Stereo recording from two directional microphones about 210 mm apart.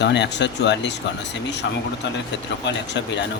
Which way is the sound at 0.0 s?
55° left (ahead or behind).